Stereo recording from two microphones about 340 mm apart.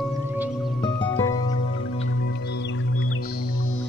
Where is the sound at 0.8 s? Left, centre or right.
Centre.